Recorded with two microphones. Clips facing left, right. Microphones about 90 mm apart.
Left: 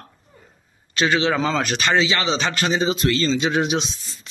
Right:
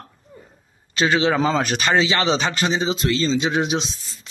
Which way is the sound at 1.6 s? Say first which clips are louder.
Right 1 dB; 30° right (ahead or behind).